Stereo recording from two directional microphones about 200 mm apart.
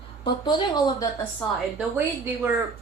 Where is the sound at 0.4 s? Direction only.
20° left (ahead or behind).